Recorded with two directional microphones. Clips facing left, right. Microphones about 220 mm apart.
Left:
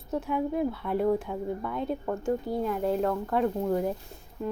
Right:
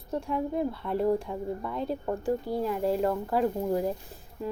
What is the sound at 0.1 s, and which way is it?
Speech, centre (ahead or behind).